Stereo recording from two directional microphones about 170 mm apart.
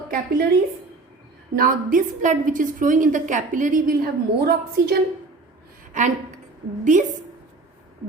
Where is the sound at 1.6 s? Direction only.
50° right (ahead or behind).